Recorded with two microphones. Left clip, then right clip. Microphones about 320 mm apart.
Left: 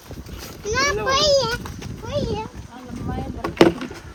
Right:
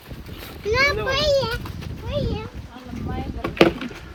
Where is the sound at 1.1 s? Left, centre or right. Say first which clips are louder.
Left 2 dB; centre.